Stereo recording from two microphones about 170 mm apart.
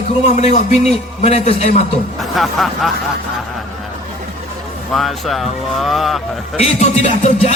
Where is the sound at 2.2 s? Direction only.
Centre (ahead or behind).